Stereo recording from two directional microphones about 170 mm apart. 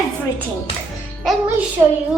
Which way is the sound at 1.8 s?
15° right (ahead or behind).